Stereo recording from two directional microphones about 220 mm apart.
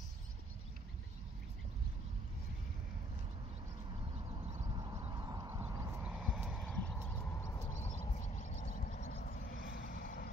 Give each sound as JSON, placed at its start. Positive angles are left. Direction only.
{"t": 4.3, "sound": "a sound", "side_deg": -25}
{"t": 4.6, "sound": "horse", "side_deg": -20}
{"t": 8.0, "sound": "vehicle", "side_deg": 35}